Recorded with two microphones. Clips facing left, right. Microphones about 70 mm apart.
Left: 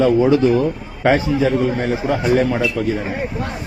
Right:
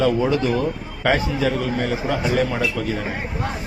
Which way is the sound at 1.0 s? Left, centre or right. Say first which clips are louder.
Left 4 dB; left.